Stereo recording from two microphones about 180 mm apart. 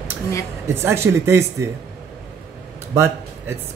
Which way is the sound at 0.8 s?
15° right (ahead or behind).